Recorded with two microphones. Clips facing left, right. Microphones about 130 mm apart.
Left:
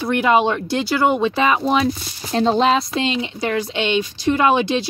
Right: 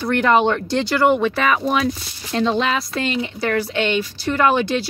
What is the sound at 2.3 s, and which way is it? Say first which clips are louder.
Speech: left 3 dB; 35° left (ahead or behind).